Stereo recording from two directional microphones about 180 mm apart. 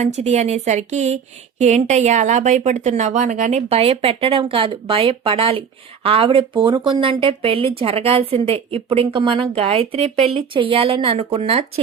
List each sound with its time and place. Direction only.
0.0 s a woman's voice: 40° right (ahead or behind)